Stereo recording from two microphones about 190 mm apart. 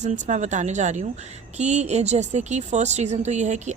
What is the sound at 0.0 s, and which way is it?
Speech, 35° right (ahead or behind).